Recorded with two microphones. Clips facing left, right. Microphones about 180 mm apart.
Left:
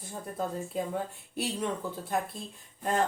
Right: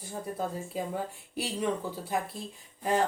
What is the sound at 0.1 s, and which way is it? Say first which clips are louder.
Speech: even; 5° right (ahead or behind).